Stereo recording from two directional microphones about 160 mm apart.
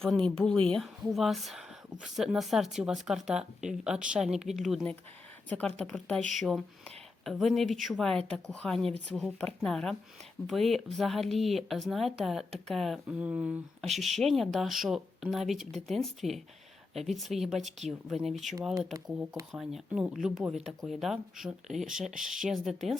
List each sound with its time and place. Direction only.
0.3 s speech: 5° left (ahead or behind)